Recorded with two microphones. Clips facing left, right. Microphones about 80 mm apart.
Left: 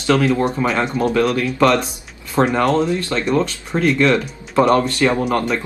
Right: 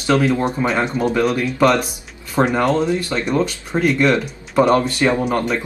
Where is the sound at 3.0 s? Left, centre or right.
Centre.